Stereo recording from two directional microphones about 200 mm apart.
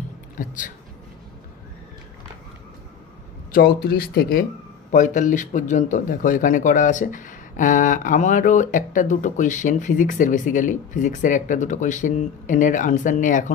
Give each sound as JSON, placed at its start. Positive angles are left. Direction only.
{"t": 3.5, "sound": "speech", "side_deg": 55}